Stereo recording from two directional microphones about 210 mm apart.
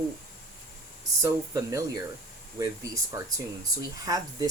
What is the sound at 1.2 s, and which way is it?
Speech, 15° right (ahead or behind).